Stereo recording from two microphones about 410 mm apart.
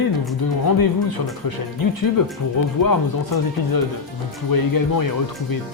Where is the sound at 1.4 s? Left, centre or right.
Left.